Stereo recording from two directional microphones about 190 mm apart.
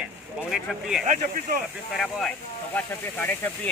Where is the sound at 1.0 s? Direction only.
45° right (ahead or behind).